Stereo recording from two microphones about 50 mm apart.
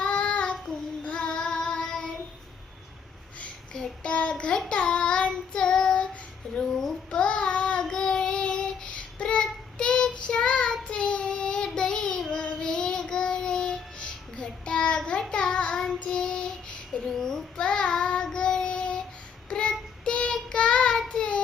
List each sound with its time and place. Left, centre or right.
0.0 s child singing: left
3.8 s child singing: centre
6.6 s a sound: centre
7.2 s child singing: left